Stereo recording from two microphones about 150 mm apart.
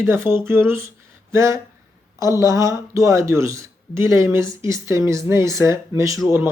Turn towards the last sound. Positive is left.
turn(degrees=-20)  # may be behind; listen again after turning